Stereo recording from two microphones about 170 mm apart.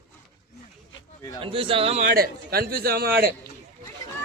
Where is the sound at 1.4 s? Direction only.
30° right (ahead or behind).